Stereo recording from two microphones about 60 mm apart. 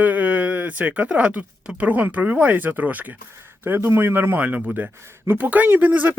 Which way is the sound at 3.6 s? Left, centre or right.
Right.